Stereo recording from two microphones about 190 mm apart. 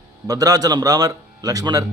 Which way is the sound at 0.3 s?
20° right (ahead or behind).